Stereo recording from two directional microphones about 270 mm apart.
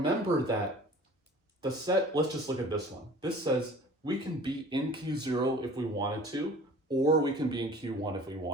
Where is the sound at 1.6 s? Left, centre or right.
Centre.